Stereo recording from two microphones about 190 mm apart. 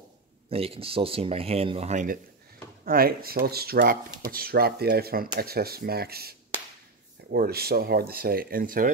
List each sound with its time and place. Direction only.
0.5 s speech: 30° right (ahead or behind)
2.8 s speech: 50° right (ahead or behind)